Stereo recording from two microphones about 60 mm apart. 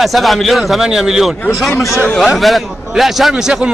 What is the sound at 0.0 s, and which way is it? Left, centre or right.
A man's voice, centre.